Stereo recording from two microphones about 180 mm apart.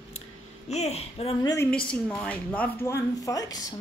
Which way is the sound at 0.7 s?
35° left (ahead or behind).